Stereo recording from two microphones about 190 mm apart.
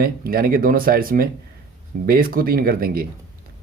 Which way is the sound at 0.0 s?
50° right (ahead or behind).